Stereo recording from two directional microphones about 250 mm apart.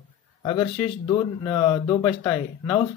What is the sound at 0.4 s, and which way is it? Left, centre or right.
Speech, centre.